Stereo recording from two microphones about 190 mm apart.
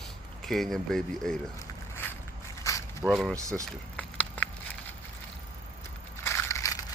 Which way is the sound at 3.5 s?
5° left (ahead or behind).